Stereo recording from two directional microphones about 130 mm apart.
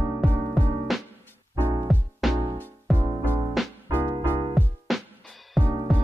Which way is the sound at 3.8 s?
15° right (ahead or behind).